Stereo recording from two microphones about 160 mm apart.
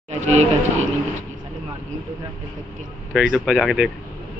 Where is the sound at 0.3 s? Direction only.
40° right (ahead or behind).